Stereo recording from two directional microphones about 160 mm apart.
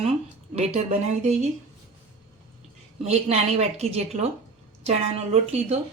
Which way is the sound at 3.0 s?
40° right (ahead or behind).